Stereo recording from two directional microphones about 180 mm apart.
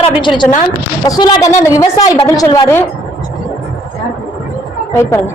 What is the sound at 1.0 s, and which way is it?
A woman's voice, 20° left (ahead or behind).